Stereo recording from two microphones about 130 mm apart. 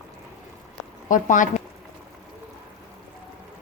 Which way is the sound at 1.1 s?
75° left (ahead or behind).